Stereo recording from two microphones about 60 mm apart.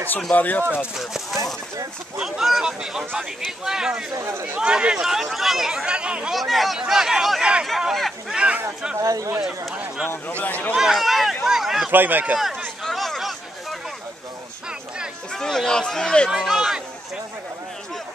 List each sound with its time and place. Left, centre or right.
0.3 s speech: left
0.9 s speech: centre
4.2 s speech: right
4.6 s speech: centre
6.3 s speech: centre
9.0 s speech: right
10.0 s a man's voice: left
10.8 s speech: centre
11.9 s speech: right
12.4 s speech: centre
12.8 s a sound: centre
15.3 s speech: centre
16.3 s speech: centre